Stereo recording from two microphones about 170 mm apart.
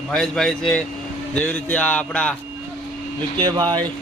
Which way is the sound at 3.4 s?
25° right (ahead or behind).